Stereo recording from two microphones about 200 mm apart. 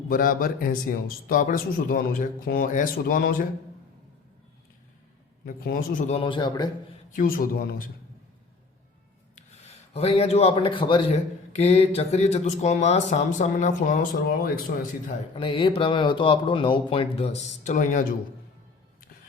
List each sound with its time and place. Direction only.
0.1 s speech: 45° left (ahead or behind)
5.5 s speech: 45° left (ahead or behind); by 6.7 s 20° left (ahead or behind)
7.1 s speech: 45° left (ahead or behind)
9.7 s speech: 30° left (ahead or behind); by 15.1 s 45° left (ahead or behind)
15.4 s speech: 25° left (ahead or behind)